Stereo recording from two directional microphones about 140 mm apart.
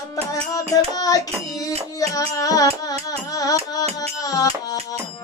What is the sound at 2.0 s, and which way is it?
Music, 25° left (ahead or behind).